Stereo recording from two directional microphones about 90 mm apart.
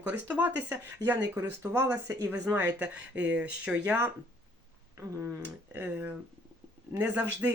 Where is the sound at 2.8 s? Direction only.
15° right (ahead or behind).